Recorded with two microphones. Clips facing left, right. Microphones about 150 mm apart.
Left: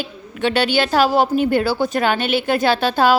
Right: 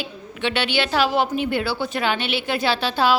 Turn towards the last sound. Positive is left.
turn(degrees=50)  # may be behind; listen again after turning